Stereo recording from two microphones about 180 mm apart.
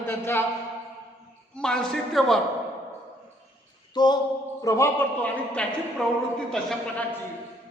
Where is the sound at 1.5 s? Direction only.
5° left (ahead or behind).